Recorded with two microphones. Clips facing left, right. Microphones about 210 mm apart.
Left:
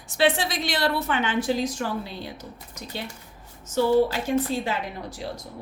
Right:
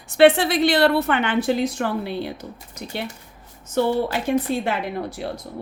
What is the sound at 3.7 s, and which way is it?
A woman's voice, 60° right (ahead or behind).